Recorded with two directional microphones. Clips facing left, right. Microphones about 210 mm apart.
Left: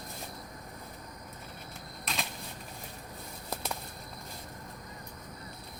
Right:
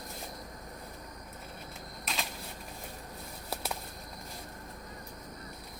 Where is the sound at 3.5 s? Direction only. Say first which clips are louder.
Even; 5° right (ahead or behind).